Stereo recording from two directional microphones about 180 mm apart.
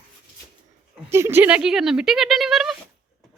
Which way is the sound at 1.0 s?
15° right (ahead or behind).